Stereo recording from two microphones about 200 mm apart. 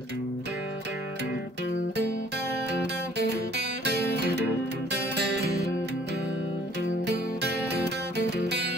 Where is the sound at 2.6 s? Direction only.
55° right (ahead or behind).